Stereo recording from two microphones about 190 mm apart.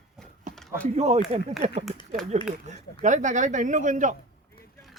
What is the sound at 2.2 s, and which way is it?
Speech, centre (ahead or behind).